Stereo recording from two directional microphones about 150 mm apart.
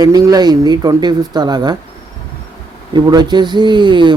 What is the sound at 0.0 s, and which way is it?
Speech, 25° right (ahead or behind).